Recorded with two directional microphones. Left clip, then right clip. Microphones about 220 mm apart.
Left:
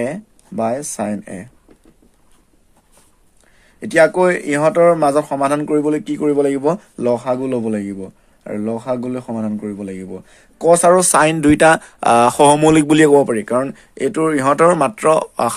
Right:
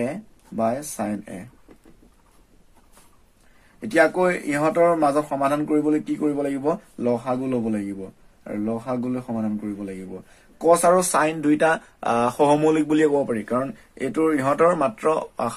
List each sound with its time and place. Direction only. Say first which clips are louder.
0.0 s speech: left 5 dB; 50° left (ahead or behind)
3.8 s speech: left 6 dB; 50° left (ahead or behind)